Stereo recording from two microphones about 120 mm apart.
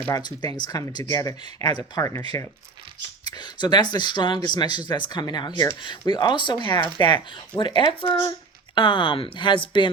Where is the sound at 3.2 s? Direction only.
35° left (ahead or behind).